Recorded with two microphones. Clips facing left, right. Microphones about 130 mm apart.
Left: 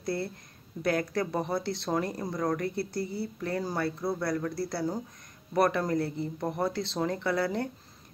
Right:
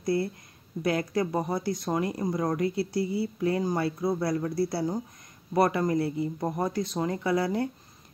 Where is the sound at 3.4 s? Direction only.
15° right (ahead or behind).